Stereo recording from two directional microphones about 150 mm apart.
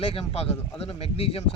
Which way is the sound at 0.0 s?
40° left (ahead or behind).